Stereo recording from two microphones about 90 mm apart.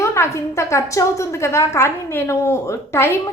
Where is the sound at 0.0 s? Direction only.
30° left (ahead or behind).